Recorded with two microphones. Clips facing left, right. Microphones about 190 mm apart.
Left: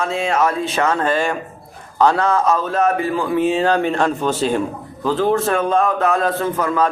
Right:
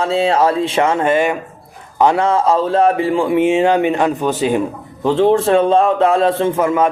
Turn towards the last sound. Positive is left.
turn(degrees=-25)  # may be behind; listen again after turning